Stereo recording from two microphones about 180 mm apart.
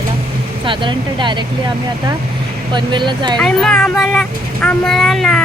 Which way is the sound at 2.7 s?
25° right (ahead or behind).